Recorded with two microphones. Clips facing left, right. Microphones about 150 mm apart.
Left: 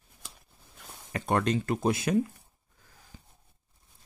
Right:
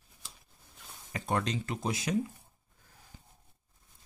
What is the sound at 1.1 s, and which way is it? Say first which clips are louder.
Speech: left 5 dB; 60° left (ahead or behind).